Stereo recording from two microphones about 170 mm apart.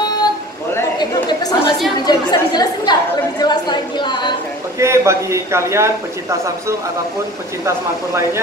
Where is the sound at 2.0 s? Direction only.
25° left (ahead or behind).